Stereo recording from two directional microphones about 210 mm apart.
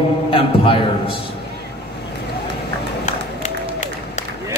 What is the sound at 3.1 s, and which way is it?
Run, 35° left (ahead or behind).